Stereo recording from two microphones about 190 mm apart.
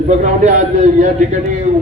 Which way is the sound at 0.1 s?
40° right (ahead or behind).